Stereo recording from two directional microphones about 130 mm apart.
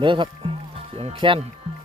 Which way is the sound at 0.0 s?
40° right (ahead or behind).